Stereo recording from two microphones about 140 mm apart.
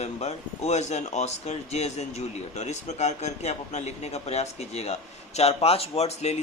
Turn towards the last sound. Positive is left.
turn(degrees=50)  # may be behind; listen again after turning